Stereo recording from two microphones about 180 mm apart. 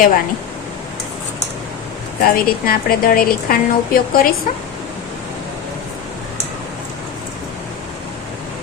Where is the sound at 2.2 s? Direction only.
55° left (ahead or behind).